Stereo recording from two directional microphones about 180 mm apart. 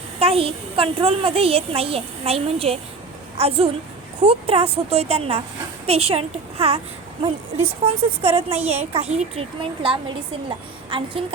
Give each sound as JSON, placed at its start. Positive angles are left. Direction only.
{"t": 0.2, "sound": "a child's voice", "side_deg": -30}
{"t": 7.8, "sound": "a child's voice", "side_deg": -35}